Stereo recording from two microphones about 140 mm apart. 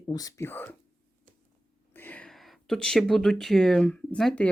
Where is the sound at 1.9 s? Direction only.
15° left (ahead or behind).